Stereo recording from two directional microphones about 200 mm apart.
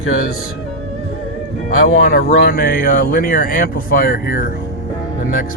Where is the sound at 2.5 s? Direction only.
45° left (ahead or behind).